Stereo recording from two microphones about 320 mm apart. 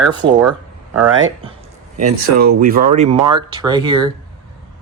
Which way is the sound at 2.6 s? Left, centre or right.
Right.